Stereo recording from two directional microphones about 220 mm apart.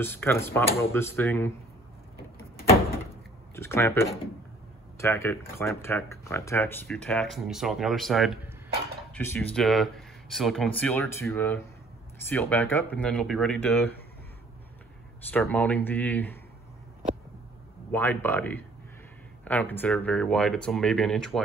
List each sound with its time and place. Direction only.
0.0 s speech: 10° left (ahead or behind)
3.5 s speech: 10° left (ahead or behind)
15.3 s speech: 5° left (ahead or behind)
17.9 s speech: 10° left (ahead or behind)